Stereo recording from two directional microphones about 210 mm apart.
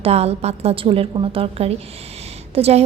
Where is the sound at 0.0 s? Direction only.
30° right (ahead or behind).